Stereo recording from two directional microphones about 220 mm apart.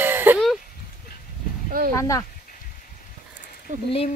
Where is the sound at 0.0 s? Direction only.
10° right (ahead or behind).